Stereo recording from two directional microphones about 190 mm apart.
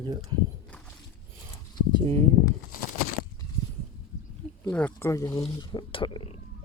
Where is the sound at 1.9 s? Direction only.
25° right (ahead or behind).